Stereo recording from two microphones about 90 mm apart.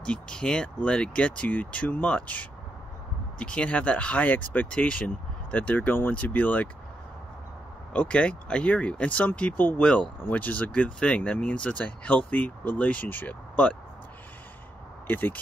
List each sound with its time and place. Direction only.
0.0 s speech: 10° left (ahead or behind)
7.9 s speech: 15° left (ahead or behind)
15.0 s speech: 20° left (ahead or behind)